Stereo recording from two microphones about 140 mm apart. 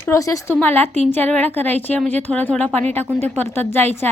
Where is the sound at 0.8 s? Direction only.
50° right (ahead or behind).